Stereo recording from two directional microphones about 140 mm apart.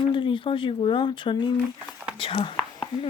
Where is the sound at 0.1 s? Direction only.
35° left (ahead or behind).